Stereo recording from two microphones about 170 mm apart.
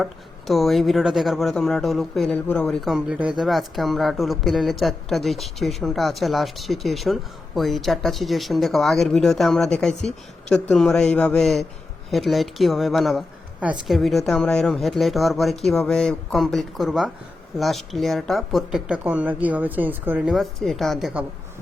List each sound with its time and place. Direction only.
0.0 s speech: centre (ahead or behind)